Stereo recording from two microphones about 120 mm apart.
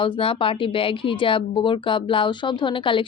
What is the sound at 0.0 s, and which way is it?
Speech, 45° left (ahead or behind).